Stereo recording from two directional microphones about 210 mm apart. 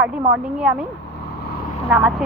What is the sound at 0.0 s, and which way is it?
Speech, 5° right (ahead or behind).